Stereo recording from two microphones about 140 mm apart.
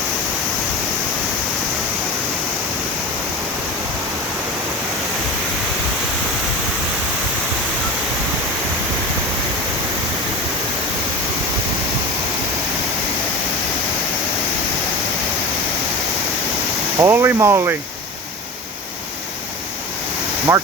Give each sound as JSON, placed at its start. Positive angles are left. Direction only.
{"t": 17.0, "sound": "speech", "side_deg": -20}
{"t": 20.5, "sound": "speech", "side_deg": -20}